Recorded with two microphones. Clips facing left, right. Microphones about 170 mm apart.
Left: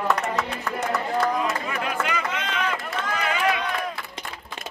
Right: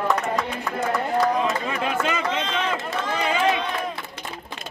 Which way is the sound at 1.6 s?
25° right (ahead or behind).